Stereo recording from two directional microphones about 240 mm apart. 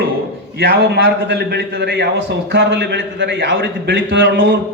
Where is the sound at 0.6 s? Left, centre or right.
Right.